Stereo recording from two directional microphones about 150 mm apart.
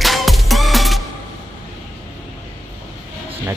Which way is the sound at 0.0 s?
Centre (ahead or behind).